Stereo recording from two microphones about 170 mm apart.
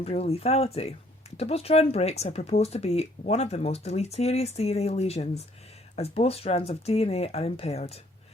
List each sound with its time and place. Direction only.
0.0 s speech: 35° left (ahead or behind)